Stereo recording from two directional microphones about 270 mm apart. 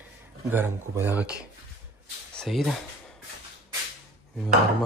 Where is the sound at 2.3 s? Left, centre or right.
Centre.